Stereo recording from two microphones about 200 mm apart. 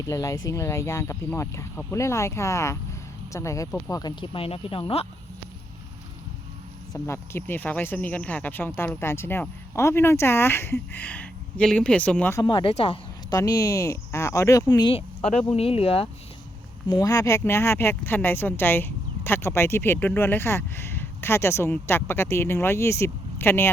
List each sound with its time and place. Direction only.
0.0 s speech: 15° left (ahead or behind)
6.9 s speech: 10° left (ahead or behind); by 13.0 s 30° left (ahead or behind)
13.3 s speech: 15° left (ahead or behind)
16.9 s speech: 15° left (ahead or behind)